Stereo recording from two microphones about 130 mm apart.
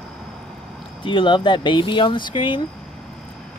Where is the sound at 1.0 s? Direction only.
40° left (ahead or behind).